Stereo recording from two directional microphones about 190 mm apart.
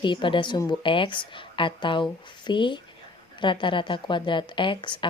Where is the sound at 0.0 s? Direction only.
25° left (ahead or behind).